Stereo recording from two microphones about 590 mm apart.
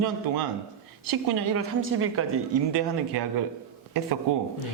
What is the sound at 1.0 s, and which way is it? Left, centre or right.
Speech, right.